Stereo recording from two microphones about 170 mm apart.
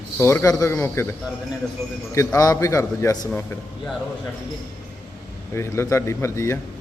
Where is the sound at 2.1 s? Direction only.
20° left (ahead or behind).